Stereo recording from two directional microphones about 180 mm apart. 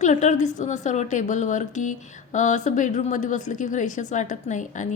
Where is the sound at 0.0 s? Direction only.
40° left (ahead or behind).